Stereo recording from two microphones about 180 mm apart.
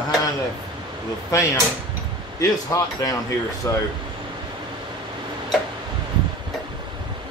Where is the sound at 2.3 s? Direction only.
20° left (ahead or behind).